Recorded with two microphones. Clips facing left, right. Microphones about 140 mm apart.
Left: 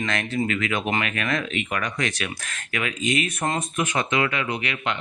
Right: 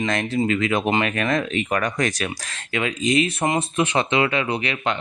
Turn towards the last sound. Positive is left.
turn(degrees=-35)  # may be behind; listen again after turning